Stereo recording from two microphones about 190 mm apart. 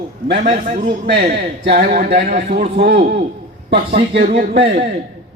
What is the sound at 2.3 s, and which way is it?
Speech, 40° right (ahead or behind).